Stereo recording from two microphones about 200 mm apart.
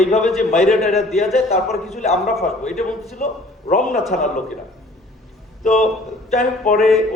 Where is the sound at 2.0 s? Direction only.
35° left (ahead or behind).